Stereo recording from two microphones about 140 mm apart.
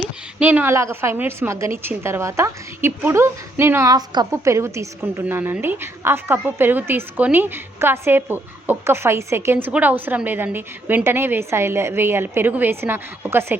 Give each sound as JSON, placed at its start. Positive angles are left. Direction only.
{"t": 0.3, "sound": "a woman's voice", "side_deg": -10}